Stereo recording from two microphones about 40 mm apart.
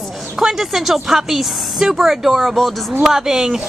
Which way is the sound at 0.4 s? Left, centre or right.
Centre.